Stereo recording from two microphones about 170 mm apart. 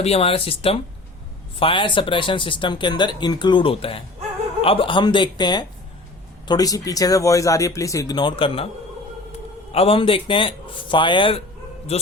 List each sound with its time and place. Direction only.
0.0 s a man's voice: 35° left (ahead or behind)
9.7 s a man's voice: 35° left (ahead or behind)